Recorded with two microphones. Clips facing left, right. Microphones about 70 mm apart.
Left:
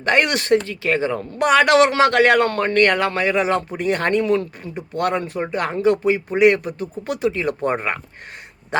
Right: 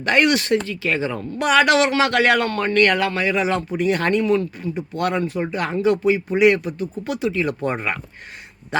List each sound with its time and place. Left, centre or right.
0.0 s speech: left